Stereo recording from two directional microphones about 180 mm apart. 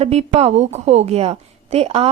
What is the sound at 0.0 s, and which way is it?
A woman's voice, 35° right (ahead or behind).